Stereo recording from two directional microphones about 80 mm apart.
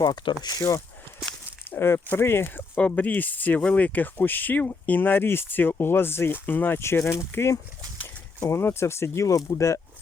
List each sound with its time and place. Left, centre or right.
0.0 s speech: left
1.7 s speech: left